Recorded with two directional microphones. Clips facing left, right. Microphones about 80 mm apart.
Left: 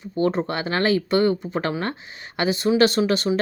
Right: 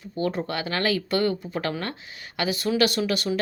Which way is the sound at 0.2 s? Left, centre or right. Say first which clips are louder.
Left 5 dB; left.